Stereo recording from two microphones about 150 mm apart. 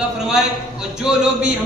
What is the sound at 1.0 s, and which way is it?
Speech, 5° right (ahead or behind).